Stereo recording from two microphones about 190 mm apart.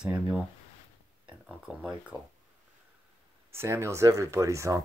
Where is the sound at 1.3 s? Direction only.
5° right (ahead or behind).